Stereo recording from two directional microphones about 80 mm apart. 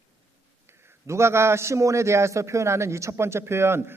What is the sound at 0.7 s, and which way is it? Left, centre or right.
A man's voice, right.